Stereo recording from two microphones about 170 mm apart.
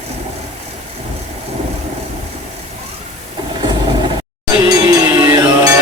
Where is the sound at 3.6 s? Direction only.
30° right (ahead or behind).